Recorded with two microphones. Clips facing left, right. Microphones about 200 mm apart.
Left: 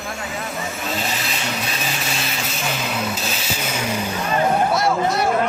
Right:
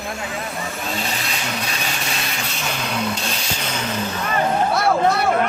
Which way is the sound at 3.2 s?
5° left (ahead or behind).